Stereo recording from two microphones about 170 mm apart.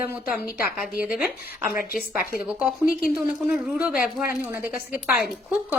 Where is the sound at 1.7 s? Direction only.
55° left (ahead or behind).